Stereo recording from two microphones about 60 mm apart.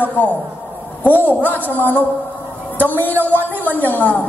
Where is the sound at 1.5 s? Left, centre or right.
Left.